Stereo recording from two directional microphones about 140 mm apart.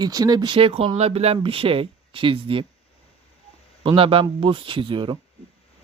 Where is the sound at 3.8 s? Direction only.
40° right (ahead or behind).